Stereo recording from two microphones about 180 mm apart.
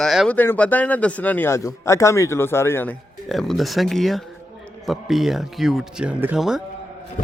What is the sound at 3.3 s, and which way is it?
Speech, centre (ahead or behind).